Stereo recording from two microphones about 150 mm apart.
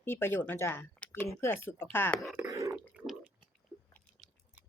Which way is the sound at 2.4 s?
20° right (ahead or behind).